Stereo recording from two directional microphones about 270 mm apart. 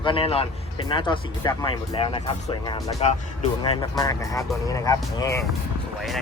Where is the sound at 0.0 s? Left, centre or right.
Centre.